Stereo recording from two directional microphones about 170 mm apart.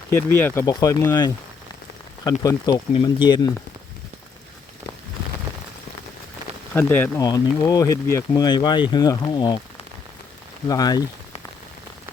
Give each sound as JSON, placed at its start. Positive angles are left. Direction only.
{"t": 0.2, "sound": "speech", "side_deg": 15}
{"t": 2.4, "sound": "speech", "side_deg": 20}
{"t": 6.7, "sound": "speech", "side_deg": 10}
{"t": 10.7, "sound": "speech", "side_deg": 20}